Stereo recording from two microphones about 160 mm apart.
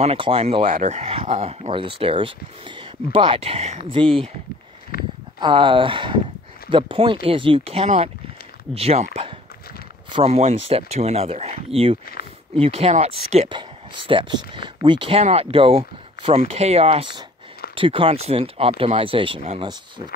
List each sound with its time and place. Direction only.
0.0 s speech: 35° right (ahead or behind)
4.9 s a sound: 65° left (ahead or behind)
5.4 s speech: 30° right (ahead or behind)
13.5 s speech: 30° right (ahead or behind)